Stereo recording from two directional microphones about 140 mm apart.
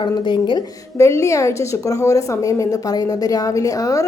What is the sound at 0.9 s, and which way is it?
A woman's voice, 20° left (ahead or behind).